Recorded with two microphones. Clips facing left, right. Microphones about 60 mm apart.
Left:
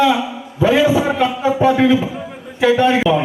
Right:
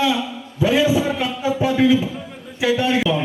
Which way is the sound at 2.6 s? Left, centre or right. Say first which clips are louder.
Left 5 dB; left.